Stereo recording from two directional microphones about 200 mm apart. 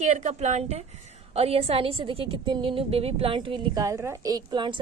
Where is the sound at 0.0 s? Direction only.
35° right (ahead or behind).